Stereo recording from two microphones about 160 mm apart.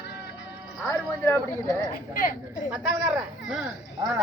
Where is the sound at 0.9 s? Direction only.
15° left (ahead or behind).